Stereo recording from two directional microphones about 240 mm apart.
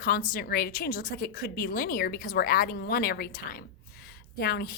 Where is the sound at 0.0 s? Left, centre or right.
Left.